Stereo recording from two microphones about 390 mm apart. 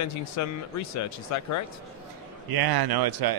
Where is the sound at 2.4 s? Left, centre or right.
Right.